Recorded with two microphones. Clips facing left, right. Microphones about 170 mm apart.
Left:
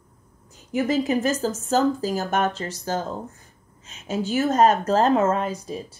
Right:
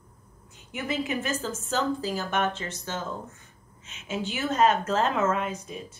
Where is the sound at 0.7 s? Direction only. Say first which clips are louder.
Left 8 dB; 40° left (ahead or behind).